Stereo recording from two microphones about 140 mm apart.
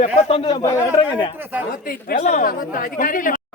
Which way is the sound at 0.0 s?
45° left (ahead or behind).